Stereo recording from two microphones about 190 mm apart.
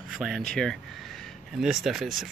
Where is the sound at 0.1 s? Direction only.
Centre (ahead or behind).